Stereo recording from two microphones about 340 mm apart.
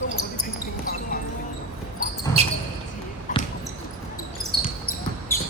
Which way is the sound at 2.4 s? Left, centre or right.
Centre.